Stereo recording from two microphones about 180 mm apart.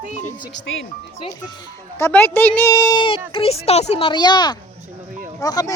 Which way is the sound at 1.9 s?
15° left (ahead or behind).